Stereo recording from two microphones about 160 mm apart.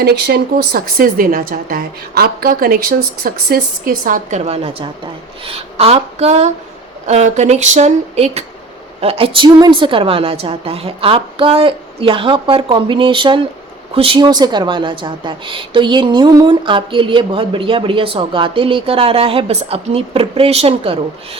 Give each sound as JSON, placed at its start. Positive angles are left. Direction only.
{"t": 0.0, "sound": "a woman's voice", "side_deg": -85}